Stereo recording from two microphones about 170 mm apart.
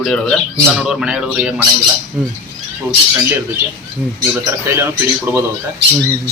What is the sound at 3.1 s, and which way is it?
Speech, 15° right (ahead or behind).